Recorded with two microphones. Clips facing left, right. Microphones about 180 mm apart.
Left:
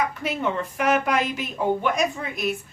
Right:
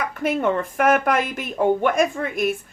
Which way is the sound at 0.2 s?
50° right (ahead or behind).